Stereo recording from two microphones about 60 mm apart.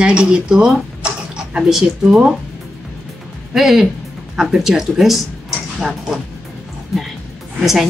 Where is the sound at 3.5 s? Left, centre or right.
Centre.